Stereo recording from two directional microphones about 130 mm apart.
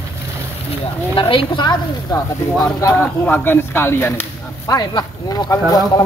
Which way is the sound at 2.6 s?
15° left (ahead or behind).